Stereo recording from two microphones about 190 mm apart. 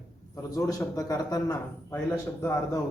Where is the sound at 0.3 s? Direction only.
15° left (ahead or behind).